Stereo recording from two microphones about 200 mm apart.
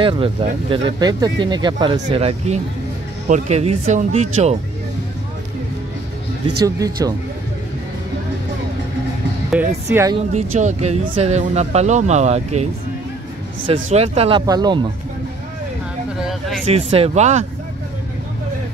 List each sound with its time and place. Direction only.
0.0 s speech: 25° right (ahead or behind)
6.6 s speech: 20° right (ahead or behind)
9.5 s speech: 5° right (ahead or behind)
10.1 s speech: 35° right (ahead or behind)
13.8 s speech: 30° right (ahead or behind)
16.3 s a sound: centre (ahead or behind)
16.6 s speech: 30° right (ahead or behind)